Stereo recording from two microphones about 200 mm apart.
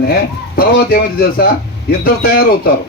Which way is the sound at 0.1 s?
50° left (ahead or behind).